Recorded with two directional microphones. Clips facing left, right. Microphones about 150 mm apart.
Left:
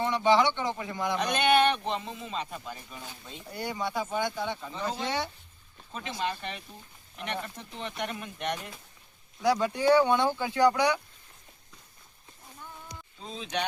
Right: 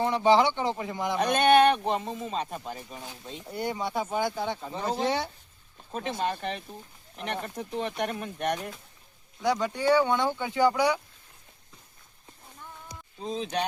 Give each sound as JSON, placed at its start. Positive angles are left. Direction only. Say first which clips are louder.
{"t": 0.0, "sound": "speech", "louder": "right 2 dB", "side_deg": -35}
{"t": 1.2, "sound": "speech", "louder": "right 4 dB", "side_deg": -45}
{"t": 3.6, "sound": "speech", "louder": "right 2 dB", "side_deg": -25}
{"t": 5.9, "sound": "speech", "louder": "right 3 dB", "side_deg": -50}
{"t": 9.4, "sound": "speech", "louder": "left 1 dB", "side_deg": 5}
{"t": 13.4, "sound": "speech", "louder": "right 1 dB", "side_deg": -35}